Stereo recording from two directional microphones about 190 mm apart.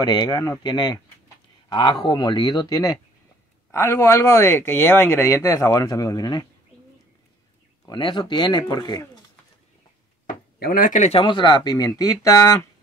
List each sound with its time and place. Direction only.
0.0 s speech: 20° left (ahead or behind)
7.8 s speech: 25° left (ahead or behind)
10.2 s speech: 50° left (ahead or behind); by 12.6 s 15° left (ahead or behind)